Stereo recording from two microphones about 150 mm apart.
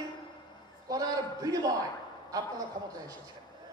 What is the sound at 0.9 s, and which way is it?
Speech, 25° right (ahead or behind).